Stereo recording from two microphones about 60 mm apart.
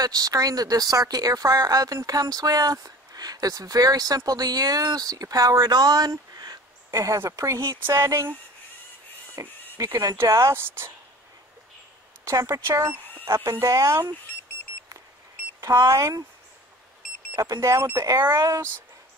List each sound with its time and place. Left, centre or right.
0.0 s speech: right
6.9 s speech: right
7.9 s speech: right
9.3 s a sound: right
10.2 s speech: right
10.5 s speech: right
12.3 s speech: right
12.5 s speech: right
15.6 s speech: right
17.4 s speech: right